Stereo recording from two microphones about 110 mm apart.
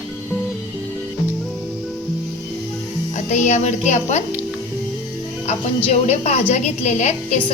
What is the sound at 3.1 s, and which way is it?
Speech, 90° left.